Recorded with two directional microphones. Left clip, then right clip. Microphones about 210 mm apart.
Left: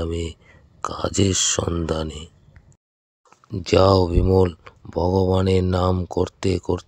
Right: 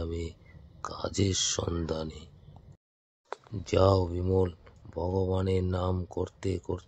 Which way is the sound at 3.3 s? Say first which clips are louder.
Left 10 dB; 40° left (ahead or behind).